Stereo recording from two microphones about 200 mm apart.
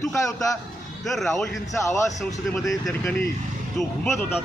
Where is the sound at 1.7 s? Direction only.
15° left (ahead or behind).